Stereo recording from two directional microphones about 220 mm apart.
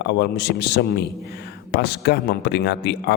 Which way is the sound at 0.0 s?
50° left (ahead or behind).